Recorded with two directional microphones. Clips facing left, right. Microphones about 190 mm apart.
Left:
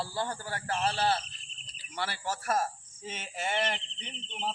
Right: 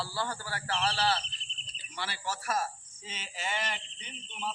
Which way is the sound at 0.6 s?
45° left (ahead or behind).